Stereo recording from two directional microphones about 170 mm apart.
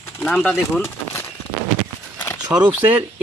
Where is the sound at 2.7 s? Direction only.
10° right (ahead or behind).